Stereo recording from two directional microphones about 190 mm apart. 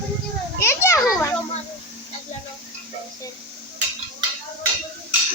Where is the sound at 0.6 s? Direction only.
15° left (ahead or behind).